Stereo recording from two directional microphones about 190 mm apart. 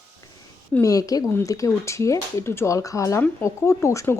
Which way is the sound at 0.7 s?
20° left (ahead or behind).